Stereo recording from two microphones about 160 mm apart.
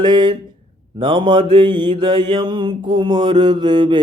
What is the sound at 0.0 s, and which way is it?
Mantra, 30° right (ahead or behind).